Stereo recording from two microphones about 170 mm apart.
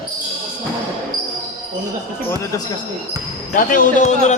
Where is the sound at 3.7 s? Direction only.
45° left (ahead or behind).